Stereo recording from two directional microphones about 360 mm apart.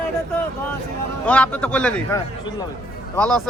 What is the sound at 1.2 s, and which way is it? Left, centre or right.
A man's voice, centre.